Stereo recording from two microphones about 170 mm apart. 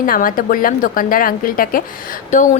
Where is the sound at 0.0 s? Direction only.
55° left (ahead or behind).